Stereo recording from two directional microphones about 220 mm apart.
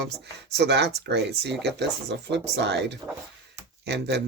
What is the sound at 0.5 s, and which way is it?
Speech, 50° right (ahead or behind).